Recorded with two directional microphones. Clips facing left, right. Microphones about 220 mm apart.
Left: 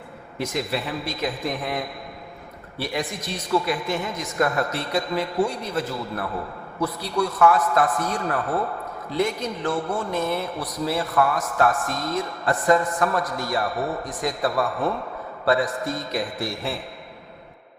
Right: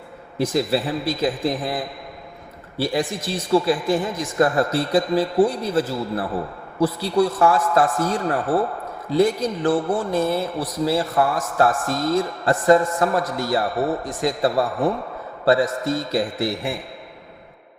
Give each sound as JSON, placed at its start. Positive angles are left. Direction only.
{"t": 0.3, "sound": "a man's voice", "side_deg": -30}